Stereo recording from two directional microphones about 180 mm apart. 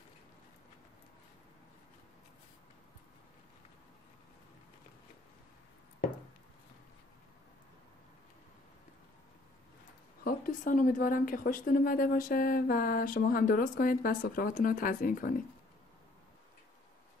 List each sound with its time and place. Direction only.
10.2 s a woman's voice: 50° left (ahead or behind)